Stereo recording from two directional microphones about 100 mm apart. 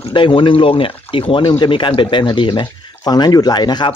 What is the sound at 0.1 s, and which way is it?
Speech, 55° left (ahead or behind).